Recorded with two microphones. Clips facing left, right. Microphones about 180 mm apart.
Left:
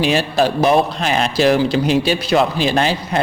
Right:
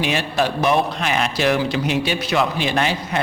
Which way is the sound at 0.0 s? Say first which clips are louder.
Left 5 dB; 35° left (ahead or behind).